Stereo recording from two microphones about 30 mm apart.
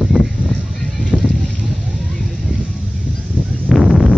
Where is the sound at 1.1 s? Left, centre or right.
Right.